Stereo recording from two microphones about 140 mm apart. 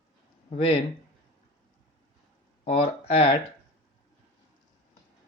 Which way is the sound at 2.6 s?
45° left (ahead or behind).